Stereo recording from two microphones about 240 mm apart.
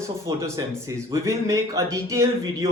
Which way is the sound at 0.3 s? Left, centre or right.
Centre.